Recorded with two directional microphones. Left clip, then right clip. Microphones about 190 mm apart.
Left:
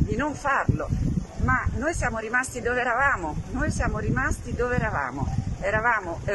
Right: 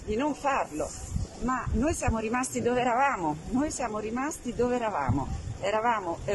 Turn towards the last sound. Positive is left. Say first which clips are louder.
# left 3 dB
turn(degrees=-15)  # may be behind; listen again after turning